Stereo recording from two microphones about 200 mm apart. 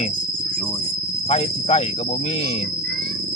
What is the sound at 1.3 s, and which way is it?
Cricket, 30° left (ahead or behind).